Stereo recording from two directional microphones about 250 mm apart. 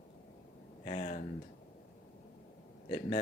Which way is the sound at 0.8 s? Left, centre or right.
Left.